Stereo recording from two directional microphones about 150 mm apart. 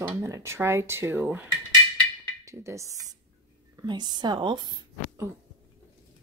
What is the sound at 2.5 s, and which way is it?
Speech, 20° right (ahead or behind).